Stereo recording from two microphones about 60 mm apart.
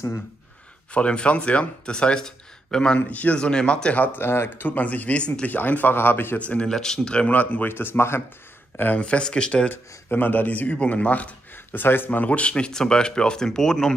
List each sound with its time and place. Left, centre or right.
0.9 s speech: centre
3.1 s speech: left
4.0 s speech: left
4.6 s speech: left
5.5 s speech: left
6.3 s speech: left
6.7 s speech: centre
7.3 s speech: left
9.0 s speech: centre
9.7 s speech: left; by 13.9 s centre